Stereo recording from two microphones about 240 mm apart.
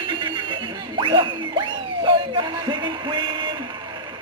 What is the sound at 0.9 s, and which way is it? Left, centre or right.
Music, right.